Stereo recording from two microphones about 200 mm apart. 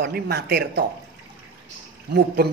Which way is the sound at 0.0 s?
50° right (ahead or behind).